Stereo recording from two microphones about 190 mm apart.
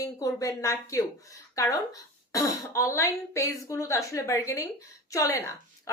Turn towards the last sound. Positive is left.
turn(degrees=15)  # may be behind; listen again after turning